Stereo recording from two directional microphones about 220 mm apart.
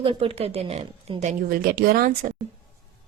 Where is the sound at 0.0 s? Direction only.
25° right (ahead or behind).